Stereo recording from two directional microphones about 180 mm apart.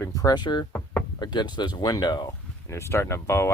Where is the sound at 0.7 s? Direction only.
5° left (ahead or behind).